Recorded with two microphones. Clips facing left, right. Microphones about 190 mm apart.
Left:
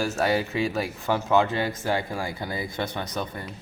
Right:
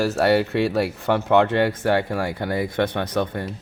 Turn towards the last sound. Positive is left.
turn(degrees=-60)  # may be behind; listen again after turning